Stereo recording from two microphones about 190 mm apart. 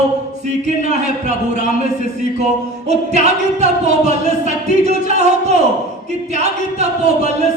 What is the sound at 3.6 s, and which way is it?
Speech, 35° right (ahead or behind).